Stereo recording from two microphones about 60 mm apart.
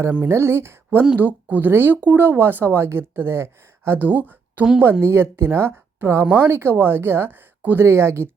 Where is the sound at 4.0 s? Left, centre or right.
Right.